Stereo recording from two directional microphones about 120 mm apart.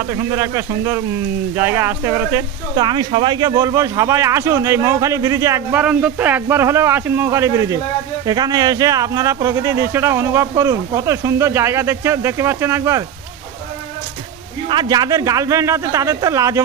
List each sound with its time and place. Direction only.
0.0 s speech: 25° right (ahead or behind)
2.7 s speech: 35° right (ahead or behind)
5.7 s speech: 10° right (ahead or behind)
14.7 s speech: 40° right (ahead or behind)